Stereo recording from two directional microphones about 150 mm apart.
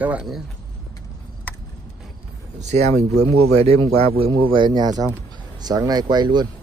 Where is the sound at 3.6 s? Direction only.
45° right (ahead or behind).